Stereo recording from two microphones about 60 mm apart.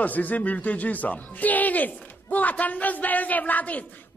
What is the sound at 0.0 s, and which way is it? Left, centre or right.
Speech, left.